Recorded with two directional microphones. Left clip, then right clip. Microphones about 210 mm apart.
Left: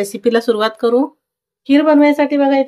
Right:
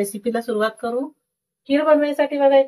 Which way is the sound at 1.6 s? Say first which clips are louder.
Left 6 dB; 35° left (ahead or behind).